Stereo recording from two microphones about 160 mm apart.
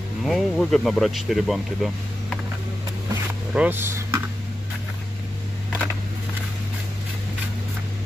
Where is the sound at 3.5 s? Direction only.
10° right (ahead or behind).